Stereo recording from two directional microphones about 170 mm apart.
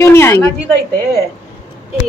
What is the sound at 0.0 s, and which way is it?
Speech, 15° left (ahead or behind).